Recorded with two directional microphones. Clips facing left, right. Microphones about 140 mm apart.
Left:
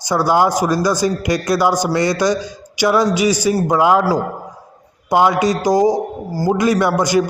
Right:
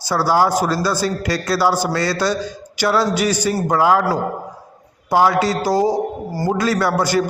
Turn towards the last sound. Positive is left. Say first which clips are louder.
# left 3 dB
turn(degrees=15)  # may be behind; listen again after turning